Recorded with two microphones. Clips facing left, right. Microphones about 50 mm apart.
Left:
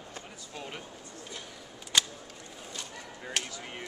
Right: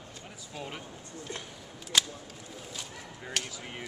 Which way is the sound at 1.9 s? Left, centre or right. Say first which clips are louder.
Even; centre.